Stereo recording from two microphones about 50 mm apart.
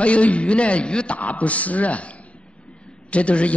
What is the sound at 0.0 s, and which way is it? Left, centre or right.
A man's voice, left.